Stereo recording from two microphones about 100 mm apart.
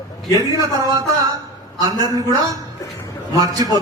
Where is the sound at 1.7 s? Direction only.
40° right (ahead or behind).